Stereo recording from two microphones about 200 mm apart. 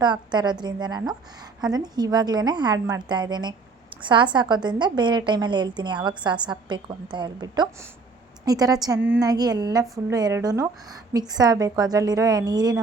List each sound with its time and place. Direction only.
0.0 s a woman's voice: 20° right (ahead or behind)